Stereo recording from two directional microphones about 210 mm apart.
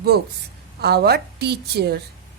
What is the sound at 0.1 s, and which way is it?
A woman's voice, 50° right (ahead or behind).